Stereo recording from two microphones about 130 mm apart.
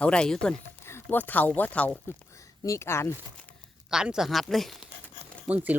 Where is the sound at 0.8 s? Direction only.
15° left (ahead or behind).